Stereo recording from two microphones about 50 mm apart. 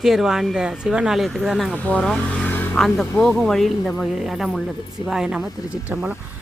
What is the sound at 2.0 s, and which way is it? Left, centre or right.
Speech, centre.